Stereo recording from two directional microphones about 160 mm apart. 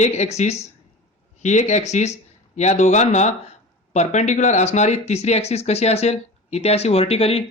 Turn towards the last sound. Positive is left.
turn(degrees=40)  # may be behind; listen again after turning